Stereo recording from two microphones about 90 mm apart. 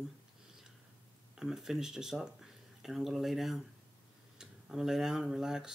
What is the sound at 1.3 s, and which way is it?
Speech, 5° right (ahead or behind).